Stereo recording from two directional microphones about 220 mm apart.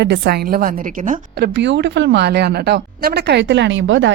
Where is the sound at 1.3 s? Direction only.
50° right (ahead or behind).